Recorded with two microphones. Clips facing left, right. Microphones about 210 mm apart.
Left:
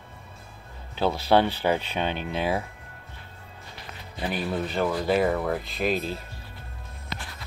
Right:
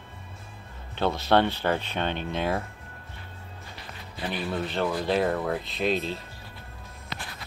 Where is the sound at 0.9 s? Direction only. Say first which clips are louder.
Left 1 dB; 5° left (ahead or behind).